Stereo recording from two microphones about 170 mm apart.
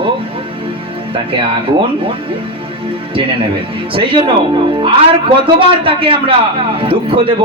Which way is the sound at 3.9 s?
30° right (ahead or behind).